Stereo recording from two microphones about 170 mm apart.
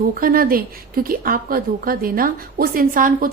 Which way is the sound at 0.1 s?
55° right (ahead or behind).